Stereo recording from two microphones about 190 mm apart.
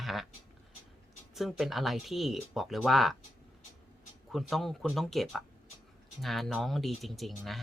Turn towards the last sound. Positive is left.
turn(degrees=0)  # may be behind; listen again after turning